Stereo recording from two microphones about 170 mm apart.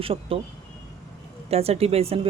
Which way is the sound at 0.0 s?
35° right (ahead or behind).